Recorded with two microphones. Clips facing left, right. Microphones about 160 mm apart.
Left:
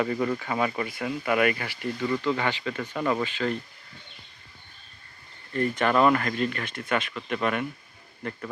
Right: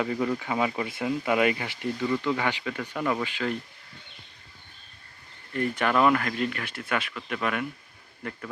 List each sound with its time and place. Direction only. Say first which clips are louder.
0.0 s speech: left 1 dB; 5° right (ahead or behind)
0.9 s speech: right 1 dB; 25° right (ahead or behind)
2.0 s speech: even; centre (ahead or behind)
2.3 s speech: even; 10° right (ahead or behind)
2.9 s speech: left 2 dB; 5° left (ahead or behind)
3.2 s speech: left 2 dB; 10° right (ahead or behind)
5.5 s speech: left 2 dB; 10° right (ahead or behind)
5.9 s speech: left 1 dB; centre (ahead or behind)
7.1 s speech: left 2 dB; 5° left (ahead or behind)